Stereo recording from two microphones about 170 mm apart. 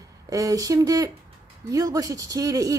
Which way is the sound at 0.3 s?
20° right (ahead or behind).